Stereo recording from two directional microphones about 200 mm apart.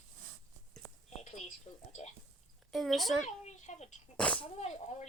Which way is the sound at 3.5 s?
35° left (ahead or behind).